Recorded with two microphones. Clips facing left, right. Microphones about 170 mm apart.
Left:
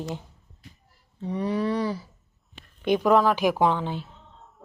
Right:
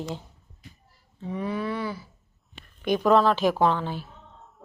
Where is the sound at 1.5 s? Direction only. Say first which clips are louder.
Left 5 dB; 35° left (ahead or behind).